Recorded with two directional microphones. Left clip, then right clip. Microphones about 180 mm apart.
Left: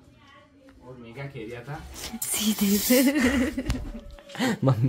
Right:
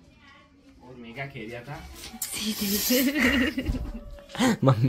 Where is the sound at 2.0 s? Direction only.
55° left (ahead or behind).